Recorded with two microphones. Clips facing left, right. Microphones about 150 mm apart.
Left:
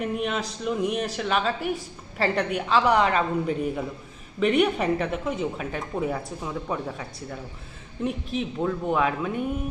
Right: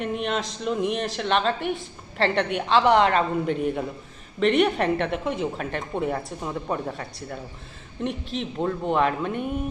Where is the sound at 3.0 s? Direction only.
35° right (ahead or behind).